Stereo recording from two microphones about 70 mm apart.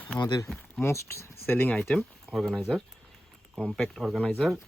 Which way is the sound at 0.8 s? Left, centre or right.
Left.